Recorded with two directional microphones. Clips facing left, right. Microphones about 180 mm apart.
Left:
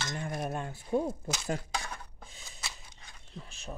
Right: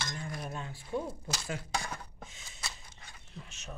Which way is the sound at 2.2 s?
35° left (ahead or behind).